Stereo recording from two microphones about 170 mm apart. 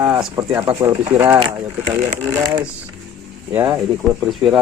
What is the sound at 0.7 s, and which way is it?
Speech, 20° right (ahead or behind).